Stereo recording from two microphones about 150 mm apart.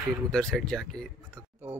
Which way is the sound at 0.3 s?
5° left (ahead or behind).